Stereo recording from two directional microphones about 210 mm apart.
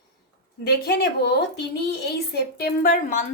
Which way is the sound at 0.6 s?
50° left (ahead or behind).